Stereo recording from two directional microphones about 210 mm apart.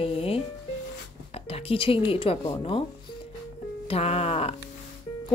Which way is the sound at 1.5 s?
25° left (ahead or behind).